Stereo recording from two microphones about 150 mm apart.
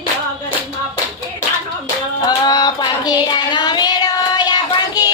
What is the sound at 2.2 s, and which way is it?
Child singing, 30° left (ahead or behind).